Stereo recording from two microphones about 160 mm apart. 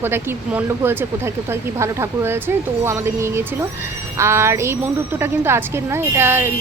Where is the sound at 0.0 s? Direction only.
15° right (ahead or behind).